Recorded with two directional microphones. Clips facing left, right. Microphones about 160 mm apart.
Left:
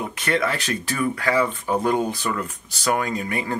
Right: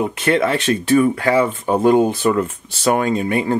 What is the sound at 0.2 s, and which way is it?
Speech, 25° right (ahead or behind).